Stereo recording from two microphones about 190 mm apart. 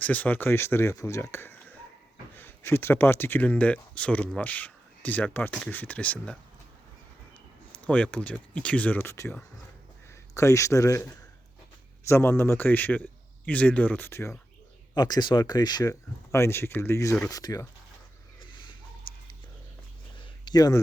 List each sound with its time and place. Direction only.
0.0 s speech: 10° left (ahead or behind)
7.9 s speech: 5° left (ahead or behind)
12.0 s speech: 15° left (ahead or behind)
19.1 s a sound: 25° left (ahead or behind)
20.4 s speech: 20° left (ahead or behind)